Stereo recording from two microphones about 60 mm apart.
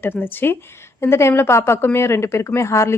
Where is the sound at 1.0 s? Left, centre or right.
Left.